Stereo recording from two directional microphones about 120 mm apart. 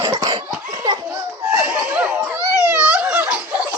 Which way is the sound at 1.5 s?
15° right (ahead or behind).